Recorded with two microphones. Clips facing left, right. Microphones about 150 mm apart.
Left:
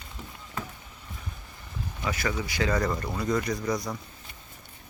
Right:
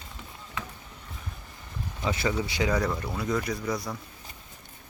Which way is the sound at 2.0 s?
25° right (ahead or behind).